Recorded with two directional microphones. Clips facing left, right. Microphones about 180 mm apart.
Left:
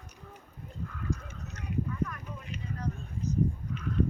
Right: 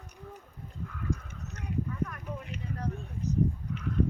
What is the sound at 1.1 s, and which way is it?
Goose, 55° right (ahead or behind).